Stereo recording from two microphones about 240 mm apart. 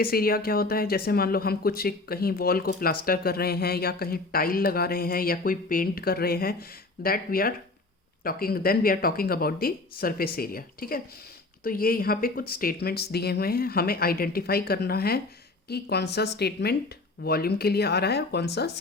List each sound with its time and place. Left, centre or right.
0.0 s speech: left